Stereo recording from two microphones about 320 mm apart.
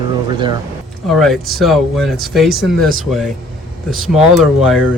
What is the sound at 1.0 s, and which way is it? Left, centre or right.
Speech, centre.